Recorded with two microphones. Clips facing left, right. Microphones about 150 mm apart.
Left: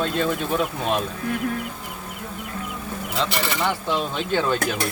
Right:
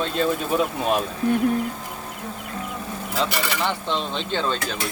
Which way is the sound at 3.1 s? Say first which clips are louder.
Even; centre (ahead or behind).